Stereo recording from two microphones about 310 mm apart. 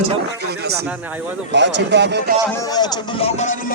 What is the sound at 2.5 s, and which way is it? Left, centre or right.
Speech, centre.